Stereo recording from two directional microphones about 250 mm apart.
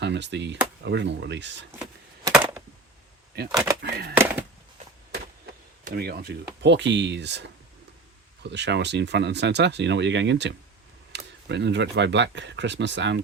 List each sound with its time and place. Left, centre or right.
0.0 s speech: right
1.8 s wood: centre
3.5 s speech: centre
3.8 s speech: right
4.2 s a sound: centre
5.8 s speech: right